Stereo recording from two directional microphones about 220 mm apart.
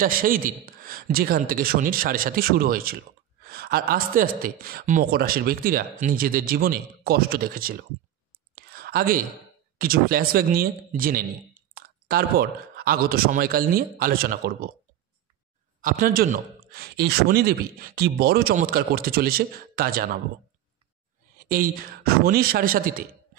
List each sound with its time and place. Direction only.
0.0 s speech: 40° right (ahead or behind)
8.5 s whispering: 45° right (ahead or behind)
9.8 s speech: 40° right (ahead or behind)
15.8 s speech: 40° right (ahead or behind)
21.5 s speech: 40° right (ahead or behind)